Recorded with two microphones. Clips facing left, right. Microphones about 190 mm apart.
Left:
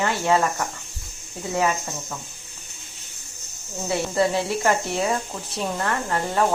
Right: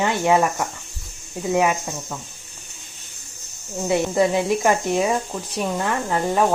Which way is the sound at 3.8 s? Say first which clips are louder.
Right 3 dB; 15° right (ahead or behind).